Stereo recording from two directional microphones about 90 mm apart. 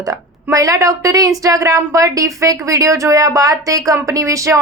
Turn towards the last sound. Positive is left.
turn(degrees=-35)  # may be behind; listen again after turning